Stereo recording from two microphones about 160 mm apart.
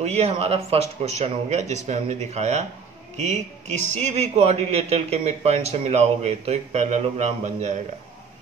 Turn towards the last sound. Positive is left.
turn(degrees=-50)  # may be behind; listen again after turning